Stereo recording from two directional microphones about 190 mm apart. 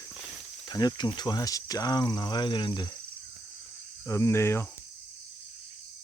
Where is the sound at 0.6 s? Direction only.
20° left (ahead or behind).